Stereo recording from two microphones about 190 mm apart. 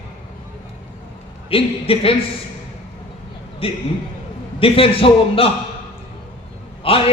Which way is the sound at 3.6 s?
30° left (ahead or behind).